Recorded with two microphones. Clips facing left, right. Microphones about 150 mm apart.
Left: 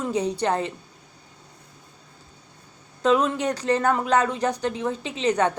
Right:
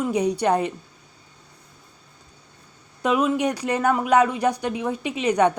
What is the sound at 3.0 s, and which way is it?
A woman's voice, 10° right (ahead or behind).